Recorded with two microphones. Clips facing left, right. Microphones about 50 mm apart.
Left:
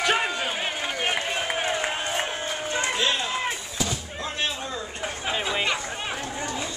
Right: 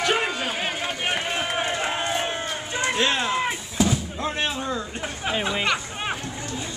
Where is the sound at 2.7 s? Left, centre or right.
Centre.